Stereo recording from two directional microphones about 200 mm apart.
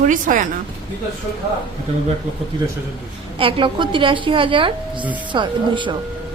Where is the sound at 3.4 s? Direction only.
25° right (ahead or behind).